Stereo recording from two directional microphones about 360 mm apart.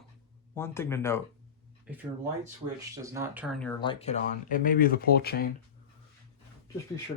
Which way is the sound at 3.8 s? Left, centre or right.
Centre.